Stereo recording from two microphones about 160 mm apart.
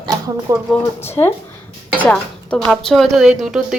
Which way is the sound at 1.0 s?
15° left (ahead or behind).